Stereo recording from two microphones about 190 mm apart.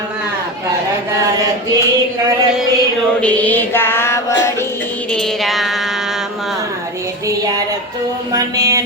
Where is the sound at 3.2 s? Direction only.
10° left (ahead or behind).